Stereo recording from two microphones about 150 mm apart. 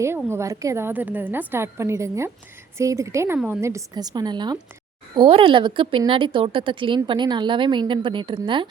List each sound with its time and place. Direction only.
0.3 s a woman's voice: 20° right (ahead or behind)